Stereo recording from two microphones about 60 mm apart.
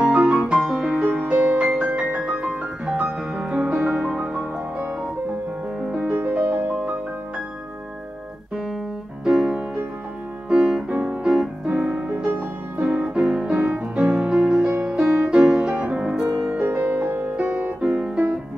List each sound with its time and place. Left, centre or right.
0.0 s music: right
0.3 s music: centre
1.2 s music: right
5.9 s music: right
9.3 s music: centre
10.9 s piano: centre
11.6 s music: right
12.8 s music: centre
16.6 s music: right
17.8 s piano: centre